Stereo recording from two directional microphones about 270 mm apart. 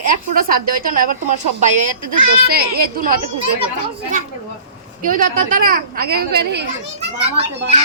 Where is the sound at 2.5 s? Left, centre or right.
Right.